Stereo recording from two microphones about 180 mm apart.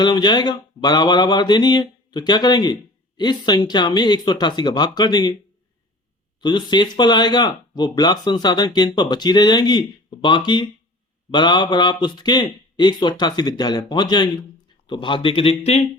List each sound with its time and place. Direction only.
0.0 s a man's voice: 25° left (ahead or behind)
6.4 s a man's voice: 25° left (ahead or behind)